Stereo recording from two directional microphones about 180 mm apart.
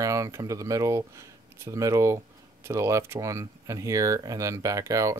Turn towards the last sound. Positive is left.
turn(degrees=-20)  # may be behind; listen again after turning